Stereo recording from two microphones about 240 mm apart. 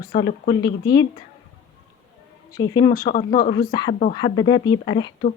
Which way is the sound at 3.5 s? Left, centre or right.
Centre.